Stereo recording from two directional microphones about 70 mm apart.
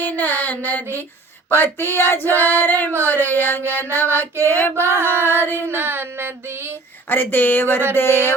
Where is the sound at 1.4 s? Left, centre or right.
Left.